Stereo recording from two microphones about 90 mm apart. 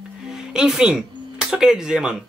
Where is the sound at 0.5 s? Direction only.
5° right (ahead or behind).